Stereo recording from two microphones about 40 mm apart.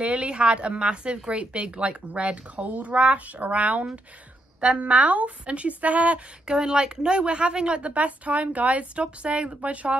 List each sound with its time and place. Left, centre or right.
0.0 s speech: right
6.4 s a woman's voice: centre